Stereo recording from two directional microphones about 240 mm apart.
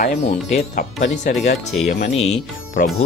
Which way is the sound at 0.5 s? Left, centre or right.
Left.